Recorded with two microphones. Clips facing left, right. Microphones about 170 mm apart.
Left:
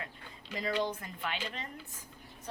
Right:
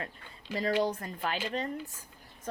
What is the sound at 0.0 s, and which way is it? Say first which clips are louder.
Speech: right 4 dB; 40° right (ahead or behind).